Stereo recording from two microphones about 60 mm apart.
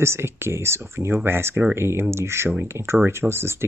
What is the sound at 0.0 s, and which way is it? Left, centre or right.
Speech, right.